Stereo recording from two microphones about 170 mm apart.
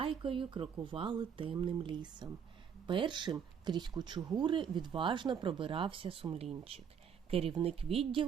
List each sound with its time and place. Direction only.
0.0 s speech: 30° right (ahead or behind)